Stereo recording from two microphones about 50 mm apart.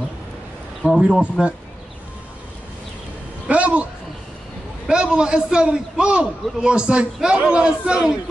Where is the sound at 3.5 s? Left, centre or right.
Right.